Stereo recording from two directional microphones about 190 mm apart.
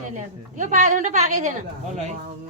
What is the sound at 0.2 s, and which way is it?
A woman's voice, 40° right (ahead or behind).